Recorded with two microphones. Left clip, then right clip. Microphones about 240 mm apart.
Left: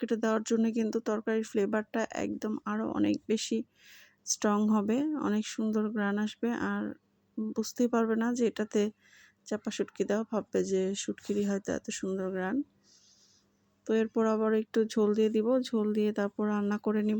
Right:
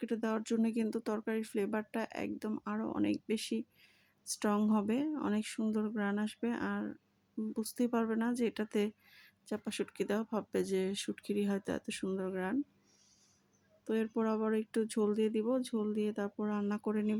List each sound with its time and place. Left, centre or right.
0.0 s speech: centre
13.8 s speech: centre